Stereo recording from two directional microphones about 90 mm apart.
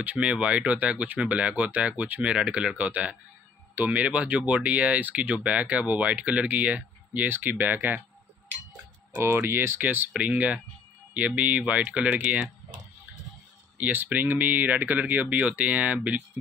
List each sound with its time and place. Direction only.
0.0 s speech: 15° right (ahead or behind)
9.1 s speech: 25° right (ahead or behind)
13.7 s speech: 20° right (ahead or behind)